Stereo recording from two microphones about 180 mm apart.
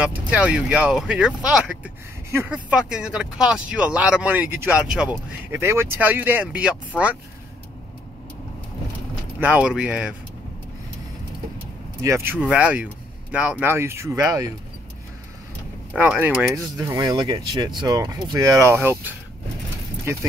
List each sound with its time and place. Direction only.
0.0 s speech: 10° right (ahead or behind)
9.4 s speech: 5° right (ahead or behind)
12.0 s speech: 15° right (ahead or behind)
15.9 s speech: 5° right (ahead or behind)
16.5 s speech: 20° right (ahead or behind)